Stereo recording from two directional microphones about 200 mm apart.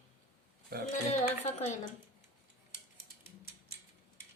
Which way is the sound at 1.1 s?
35° left (ahead or behind).